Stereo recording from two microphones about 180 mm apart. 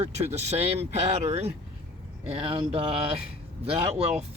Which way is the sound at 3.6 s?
35° right (ahead or behind).